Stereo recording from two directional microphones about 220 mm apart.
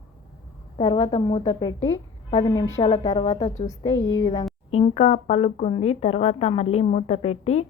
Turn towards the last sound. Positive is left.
turn(degrees=30)  # may be behind; listen again after turning